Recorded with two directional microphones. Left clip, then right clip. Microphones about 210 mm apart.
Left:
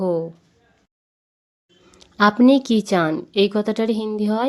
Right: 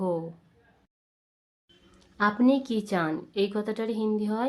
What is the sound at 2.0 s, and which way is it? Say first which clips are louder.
Speech: left 9 dB; 35° left (ahead or behind).